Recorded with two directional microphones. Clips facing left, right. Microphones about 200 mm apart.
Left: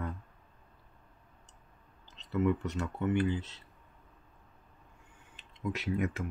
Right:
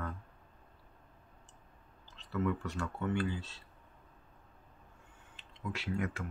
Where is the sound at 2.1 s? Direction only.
20° left (ahead or behind).